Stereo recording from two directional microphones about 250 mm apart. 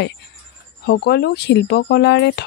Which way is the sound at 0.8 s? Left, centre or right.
Left.